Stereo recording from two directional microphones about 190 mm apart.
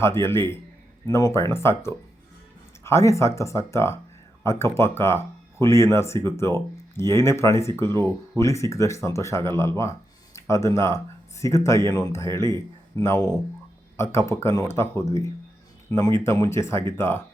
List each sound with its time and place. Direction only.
0.0 s speech: 15° left (ahead or behind)